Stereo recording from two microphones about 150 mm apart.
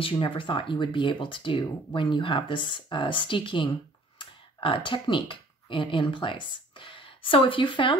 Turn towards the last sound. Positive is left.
turn(degrees=35)  # may be behind; listen again after turning